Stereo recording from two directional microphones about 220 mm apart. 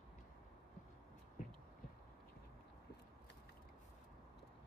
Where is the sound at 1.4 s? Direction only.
35° left (ahead or behind).